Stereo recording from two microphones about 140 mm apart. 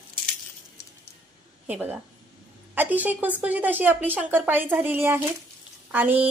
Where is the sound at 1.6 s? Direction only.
10° right (ahead or behind).